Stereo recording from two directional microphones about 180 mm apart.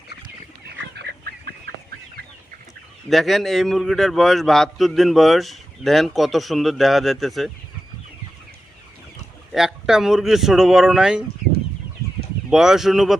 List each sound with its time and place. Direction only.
0.9 s duck: 65° right (ahead or behind)
3.1 s a man's voice: centre (ahead or behind)
9.5 s a man's voice: centre (ahead or behind)
12.5 s a man's voice: centre (ahead or behind)